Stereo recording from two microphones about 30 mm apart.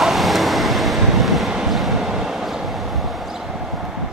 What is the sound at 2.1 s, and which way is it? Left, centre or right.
Vehicle, centre.